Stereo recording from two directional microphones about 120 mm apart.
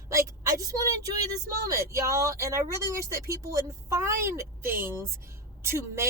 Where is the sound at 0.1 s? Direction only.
25° right (ahead or behind).